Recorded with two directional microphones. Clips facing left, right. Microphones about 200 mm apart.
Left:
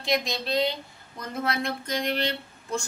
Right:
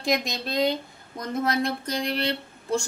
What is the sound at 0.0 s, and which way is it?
Speech, 45° right (ahead or behind).